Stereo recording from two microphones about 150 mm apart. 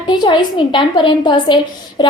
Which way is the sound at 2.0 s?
30° left (ahead or behind).